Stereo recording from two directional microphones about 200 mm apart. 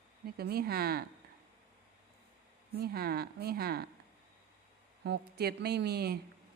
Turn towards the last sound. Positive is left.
turn(degrees=-50)  # may be behind; listen again after turning